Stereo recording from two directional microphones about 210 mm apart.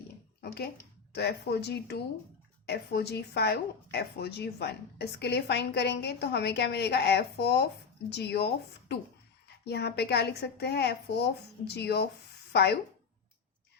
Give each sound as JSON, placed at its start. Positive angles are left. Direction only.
{"t": 0.4, "sound": "a sound", "side_deg": 50}
{"t": 1.1, "sound": "speech", "side_deg": 50}
{"t": 9.6, "sound": "speech", "side_deg": 50}